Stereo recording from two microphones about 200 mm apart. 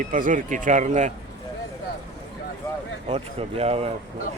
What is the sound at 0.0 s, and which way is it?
A man's voice, 40° right (ahead or behind).